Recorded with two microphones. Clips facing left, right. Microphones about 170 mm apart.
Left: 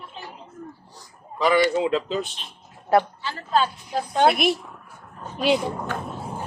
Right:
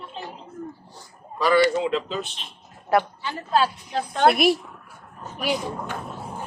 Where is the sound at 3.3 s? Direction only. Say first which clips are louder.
Right 1 dB; 10° right (ahead or behind).